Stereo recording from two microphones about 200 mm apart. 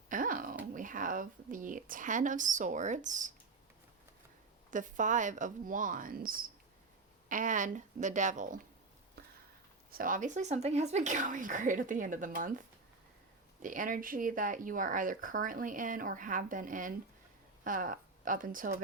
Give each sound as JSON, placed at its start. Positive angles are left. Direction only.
{"t": 0.1, "sound": "dog", "side_deg": -45}
{"t": 0.7, "sound": "speech", "side_deg": -40}
{"t": 4.7, "sound": "speech", "side_deg": -40}
{"t": 9.9, "sound": "speech", "side_deg": -45}